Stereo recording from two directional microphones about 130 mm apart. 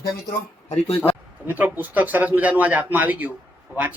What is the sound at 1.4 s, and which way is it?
A man's voice, 15° right (ahead or behind).